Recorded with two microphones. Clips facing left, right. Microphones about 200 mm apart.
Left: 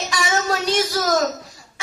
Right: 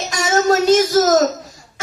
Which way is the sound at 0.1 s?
45° right (ahead or behind).